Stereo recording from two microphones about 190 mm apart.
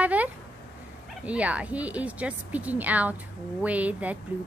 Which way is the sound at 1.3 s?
5° right (ahead or behind).